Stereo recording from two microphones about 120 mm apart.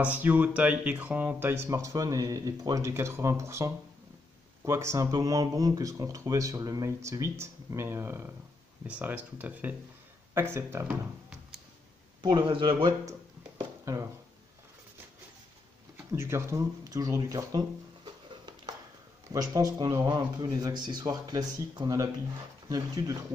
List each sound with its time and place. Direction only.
0.0 s speech: 10° right (ahead or behind)
12.2 s speech: 40° right (ahead or behind)
13.9 s speech: 25° right (ahead or behind)
16.1 s speech: 20° right (ahead or behind)
19.5 s speech: 30° right (ahead or behind)